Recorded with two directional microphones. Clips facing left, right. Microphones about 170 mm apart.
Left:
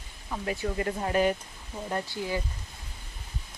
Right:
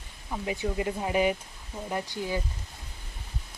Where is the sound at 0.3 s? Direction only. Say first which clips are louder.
Even; 10° right (ahead or behind).